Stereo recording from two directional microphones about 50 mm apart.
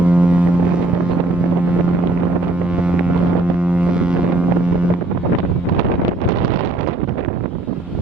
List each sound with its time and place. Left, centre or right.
0.1 s boat: right
3.8 s foghorn: centre